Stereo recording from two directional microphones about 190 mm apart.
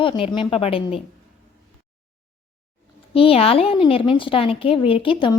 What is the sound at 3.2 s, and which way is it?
A woman's voice, 30° left (ahead or behind).